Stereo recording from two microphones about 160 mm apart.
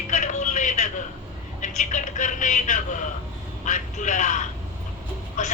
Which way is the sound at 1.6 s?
50° left (ahead or behind).